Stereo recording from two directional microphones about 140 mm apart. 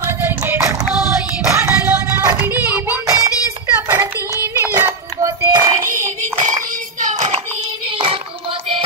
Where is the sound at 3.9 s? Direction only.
15° right (ahead or behind).